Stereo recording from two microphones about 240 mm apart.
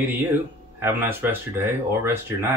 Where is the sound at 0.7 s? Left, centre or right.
Centre.